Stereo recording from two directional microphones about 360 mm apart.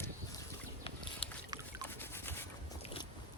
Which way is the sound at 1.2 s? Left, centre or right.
Centre.